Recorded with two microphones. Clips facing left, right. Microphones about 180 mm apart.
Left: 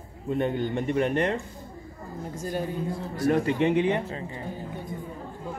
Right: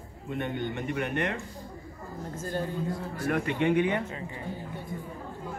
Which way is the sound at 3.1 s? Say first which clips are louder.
Left 7 dB; 35° left (ahead or behind).